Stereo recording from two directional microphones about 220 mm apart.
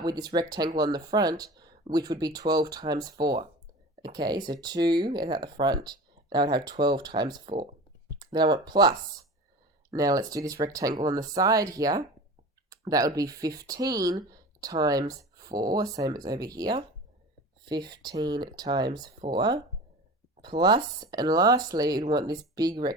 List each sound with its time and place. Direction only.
0.0 s speech: 20° right (ahead or behind)